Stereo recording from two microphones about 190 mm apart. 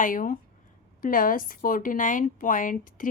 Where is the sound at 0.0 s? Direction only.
45° left (ahead or behind).